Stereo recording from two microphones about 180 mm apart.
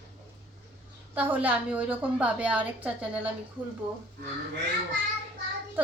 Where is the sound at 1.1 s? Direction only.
10° right (ahead or behind).